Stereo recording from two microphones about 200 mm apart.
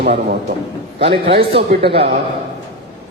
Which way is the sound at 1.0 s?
30° right (ahead or behind).